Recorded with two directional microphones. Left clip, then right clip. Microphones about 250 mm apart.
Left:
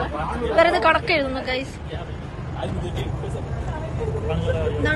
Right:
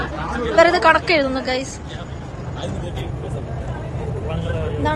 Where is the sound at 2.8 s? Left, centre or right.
Centre.